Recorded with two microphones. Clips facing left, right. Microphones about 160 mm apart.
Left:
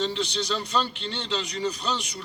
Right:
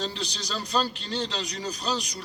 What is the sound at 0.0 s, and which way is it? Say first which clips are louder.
A man's voice: left 5 dB; 40° right (ahead or behind).